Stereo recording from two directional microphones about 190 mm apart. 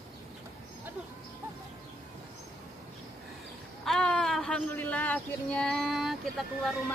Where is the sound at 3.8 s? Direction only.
5° left (ahead or behind).